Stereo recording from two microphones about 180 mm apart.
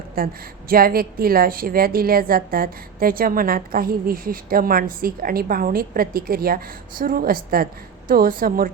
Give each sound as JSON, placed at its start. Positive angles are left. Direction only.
{"t": 0.2, "sound": "a woman's voice", "side_deg": -55}